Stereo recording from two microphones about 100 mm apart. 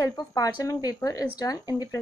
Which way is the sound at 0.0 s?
35° left (ahead or behind).